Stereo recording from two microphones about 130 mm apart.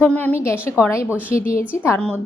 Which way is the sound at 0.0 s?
10° left (ahead or behind).